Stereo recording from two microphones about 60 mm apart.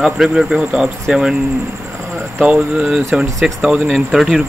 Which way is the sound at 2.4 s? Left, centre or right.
Centre.